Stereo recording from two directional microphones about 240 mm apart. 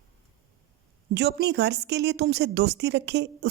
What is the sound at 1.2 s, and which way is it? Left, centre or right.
A woman's voice, right.